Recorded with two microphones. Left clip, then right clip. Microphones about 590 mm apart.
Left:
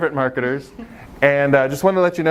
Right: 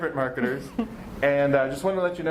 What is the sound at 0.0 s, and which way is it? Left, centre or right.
Speech, left.